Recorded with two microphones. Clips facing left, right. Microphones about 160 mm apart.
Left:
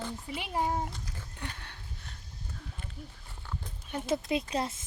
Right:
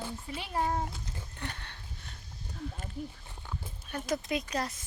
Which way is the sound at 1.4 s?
5° left (ahead or behind).